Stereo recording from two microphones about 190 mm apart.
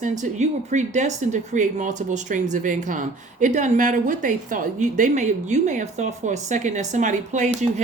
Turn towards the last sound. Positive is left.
turn(degrees=-40)  # may be behind; listen again after turning